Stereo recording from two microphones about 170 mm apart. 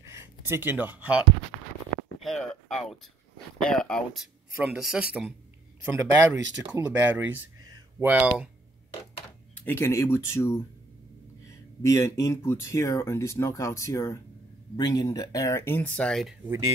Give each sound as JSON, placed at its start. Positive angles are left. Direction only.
{"t": 0.0, "sound": "speech", "side_deg": -15}
{"t": 9.7, "sound": "speech", "side_deg": 15}